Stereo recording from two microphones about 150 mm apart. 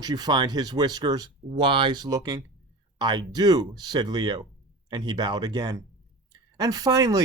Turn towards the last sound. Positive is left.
turn(degrees=-25)  # may be behind; listen again after turning